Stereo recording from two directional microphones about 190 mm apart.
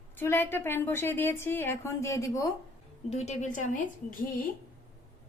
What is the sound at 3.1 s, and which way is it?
Speech, 35° left (ahead or behind).